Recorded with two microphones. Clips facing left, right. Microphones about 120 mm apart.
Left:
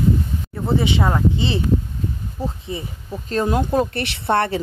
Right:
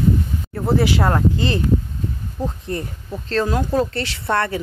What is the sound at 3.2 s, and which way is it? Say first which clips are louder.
Speech: even; 15° left (ahead or behind).